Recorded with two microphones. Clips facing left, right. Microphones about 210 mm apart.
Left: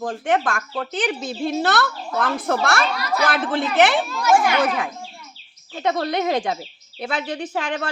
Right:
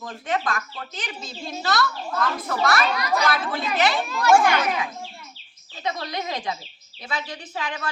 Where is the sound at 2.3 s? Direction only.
75° left (ahead or behind).